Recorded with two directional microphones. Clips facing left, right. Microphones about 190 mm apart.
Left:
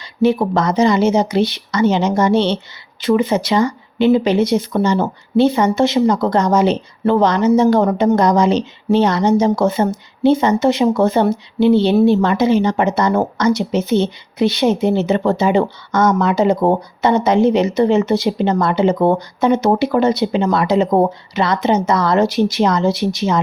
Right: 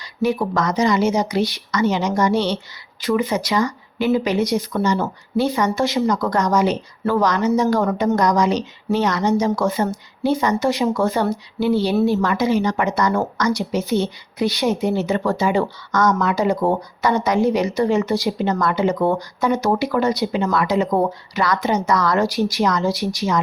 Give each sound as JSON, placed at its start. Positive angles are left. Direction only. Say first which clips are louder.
{"t": 0.2, "sound": "speech", "louder": "left 5 dB", "side_deg": 25}